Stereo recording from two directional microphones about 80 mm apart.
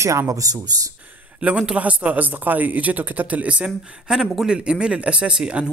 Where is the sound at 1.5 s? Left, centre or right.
Centre.